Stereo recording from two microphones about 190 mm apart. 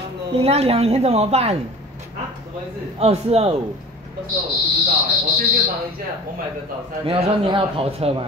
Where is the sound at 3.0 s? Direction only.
35° right (ahead or behind).